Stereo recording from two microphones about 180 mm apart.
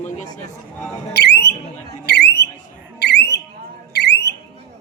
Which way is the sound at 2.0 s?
65° left (ahead or behind).